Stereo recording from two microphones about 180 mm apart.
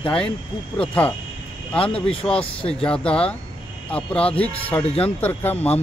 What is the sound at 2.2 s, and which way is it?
Speech, 5° left (ahead or behind).